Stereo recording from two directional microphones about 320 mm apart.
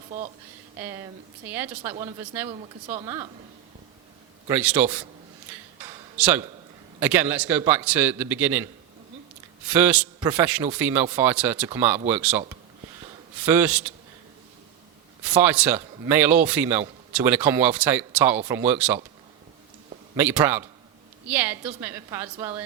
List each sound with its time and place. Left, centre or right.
1.5 s speech: centre
2.5 s speech: centre
4.4 s a man's voice: centre
5.8 s a sound: centre
7.0 s a man's voice: centre
9.6 s a man's voice: centre
13.4 s a man's voice: centre
15.2 s a man's voice: centre
20.1 s a man's voice: centre